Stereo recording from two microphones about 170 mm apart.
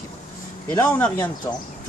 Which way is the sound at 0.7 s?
15° left (ahead or behind).